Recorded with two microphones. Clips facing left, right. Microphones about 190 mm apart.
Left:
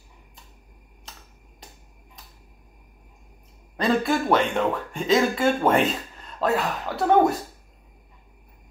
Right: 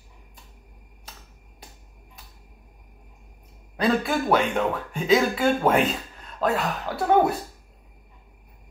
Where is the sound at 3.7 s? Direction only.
5° right (ahead or behind).